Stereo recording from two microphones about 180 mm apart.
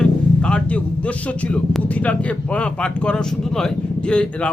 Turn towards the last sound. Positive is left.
turn(degrees=5)  # may be behind; listen again after turning